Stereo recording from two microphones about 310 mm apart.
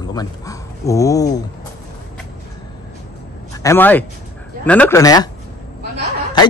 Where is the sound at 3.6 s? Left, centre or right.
Centre.